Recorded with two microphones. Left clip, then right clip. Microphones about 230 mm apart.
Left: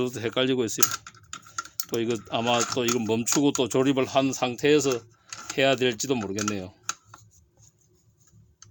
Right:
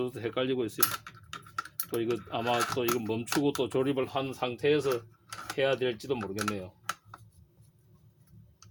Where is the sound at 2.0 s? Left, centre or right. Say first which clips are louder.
Left 4 dB; left.